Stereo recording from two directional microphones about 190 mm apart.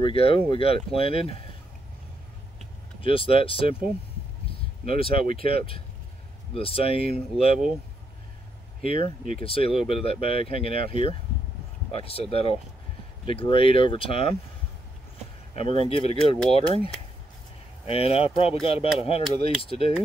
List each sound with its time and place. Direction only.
0.0 s speech: 30° left (ahead or behind)
3.0 s speech: 30° left (ahead or behind)
4.8 s speech: 30° left (ahead or behind)
8.8 s speech: 30° left (ahead or behind)
15.9 s speech: 30° left (ahead or behind)